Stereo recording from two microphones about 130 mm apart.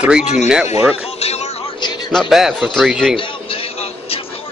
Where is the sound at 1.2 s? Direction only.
55° left (ahead or behind).